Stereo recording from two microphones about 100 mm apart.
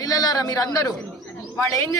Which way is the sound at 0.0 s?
40° left (ahead or behind).